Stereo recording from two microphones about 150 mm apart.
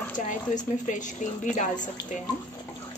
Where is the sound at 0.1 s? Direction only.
55° left (ahead or behind).